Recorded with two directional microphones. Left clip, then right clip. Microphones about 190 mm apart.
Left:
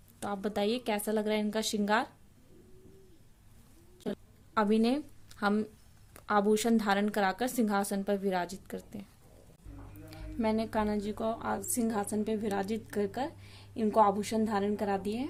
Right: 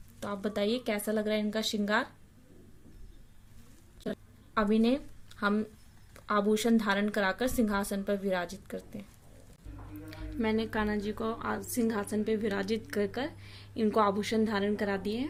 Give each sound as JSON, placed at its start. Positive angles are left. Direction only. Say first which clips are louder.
{"t": 0.2, "sound": "a woman's voice", "louder": "even", "side_deg": 30}
{"t": 4.0, "sound": "a sound", "louder": "even", "side_deg": 30}
{"t": 6.1, "sound": "a woman's voice", "louder": "left 1 dB", "side_deg": 30}
{"t": 10.1, "sound": "a woman's voice", "louder": "even", "side_deg": 20}